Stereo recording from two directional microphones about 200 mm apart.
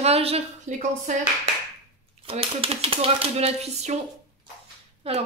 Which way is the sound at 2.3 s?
30° right (ahead or behind).